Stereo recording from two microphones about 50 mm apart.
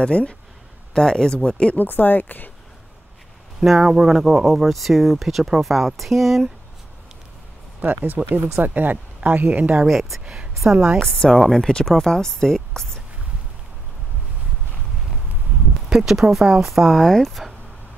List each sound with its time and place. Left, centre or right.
0.0 s speech: left
0.9 s speech: centre
1.8 s speech: left
3.8 s speech: centre
4.1 s speech: centre
7.8 s speech: right
9.8 s speech: centre
10.2 s a sound: right
10.6 s a woman's voice: centre
11.0 s speech: centre
15.9 s speech: centre
16.7 s speech: centre